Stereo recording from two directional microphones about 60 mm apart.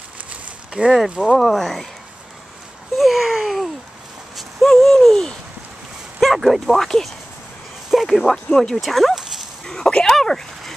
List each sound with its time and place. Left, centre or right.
0.3 s a sound: centre
1.2 s speech: centre
3.0 s a sound: centre
4.4 s owl: centre
6.2 s speech: centre
9.7 s speech: centre